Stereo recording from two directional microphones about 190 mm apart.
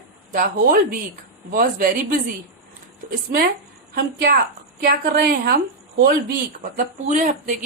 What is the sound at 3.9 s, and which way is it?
A woman's voice, 55° right (ahead or behind).